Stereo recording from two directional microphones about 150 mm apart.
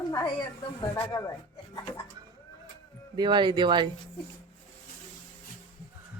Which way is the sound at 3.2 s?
30° right (ahead or behind).